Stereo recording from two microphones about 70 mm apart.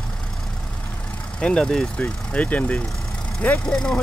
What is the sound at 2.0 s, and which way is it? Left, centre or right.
Speech, left.